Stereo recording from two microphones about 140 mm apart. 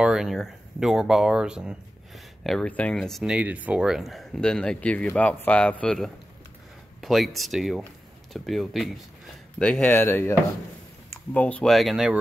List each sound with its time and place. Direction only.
0.0 s speech: 5° right (ahead or behind)
2.4 s speech: 5° left (ahead or behind)
3.3 s speech: 10° right (ahead or behind)
9.6 s speech: 10° left (ahead or behind)
11.3 s speech: 10° left (ahead or behind)